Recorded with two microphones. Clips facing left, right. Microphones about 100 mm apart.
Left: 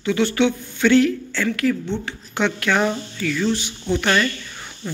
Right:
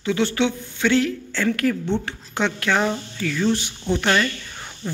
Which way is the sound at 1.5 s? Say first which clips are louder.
Even; 45° right (ahead or behind).